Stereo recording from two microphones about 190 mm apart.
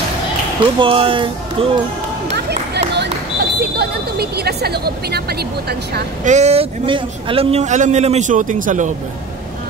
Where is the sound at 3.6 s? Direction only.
55° right (ahead or behind).